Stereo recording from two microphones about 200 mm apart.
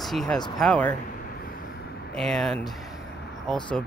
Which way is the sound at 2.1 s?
Centre (ahead or behind).